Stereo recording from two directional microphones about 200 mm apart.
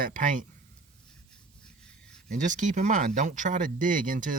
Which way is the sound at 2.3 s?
40° right (ahead or behind).